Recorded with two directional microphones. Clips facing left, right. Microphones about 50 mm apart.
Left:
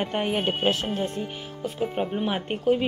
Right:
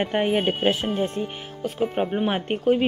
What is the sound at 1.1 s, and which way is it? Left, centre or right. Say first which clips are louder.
Speech: right 3 dB; right.